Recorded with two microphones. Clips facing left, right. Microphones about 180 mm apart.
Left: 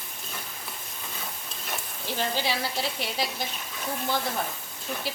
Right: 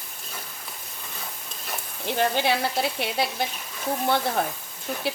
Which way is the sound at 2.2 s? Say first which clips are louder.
Right 6 dB; 60° right (ahead or behind).